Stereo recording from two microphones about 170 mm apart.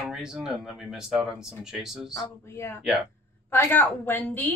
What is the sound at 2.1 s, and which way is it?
Speech, 15° left (ahead or behind).